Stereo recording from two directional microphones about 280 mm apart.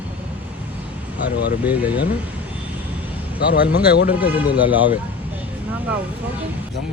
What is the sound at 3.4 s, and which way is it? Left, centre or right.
Speech, left.